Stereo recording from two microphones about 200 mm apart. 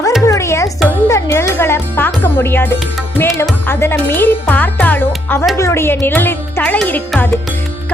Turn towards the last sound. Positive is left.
turn(degrees=5)  # may be behind; listen again after turning